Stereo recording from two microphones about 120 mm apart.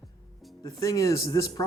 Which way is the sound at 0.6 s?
30° left (ahead or behind).